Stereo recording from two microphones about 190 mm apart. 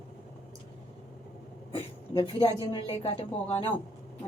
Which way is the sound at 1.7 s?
25° left (ahead or behind).